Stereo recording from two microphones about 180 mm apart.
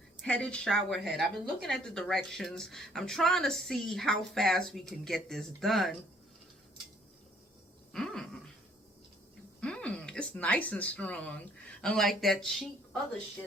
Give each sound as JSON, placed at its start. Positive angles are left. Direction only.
{"t": 0.2, "sound": "a woman's voice", "side_deg": 5}
{"t": 7.9, "sound": "a sound", "side_deg": 0}
{"t": 9.6, "sound": "speech", "side_deg": 5}